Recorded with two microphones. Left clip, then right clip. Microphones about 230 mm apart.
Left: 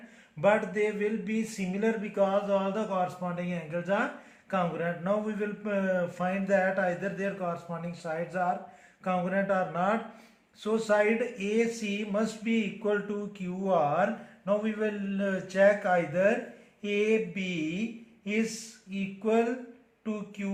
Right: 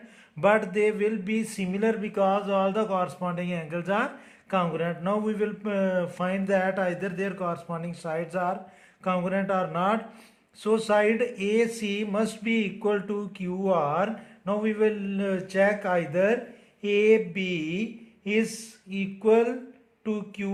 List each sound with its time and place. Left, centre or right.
0.4 s speech: right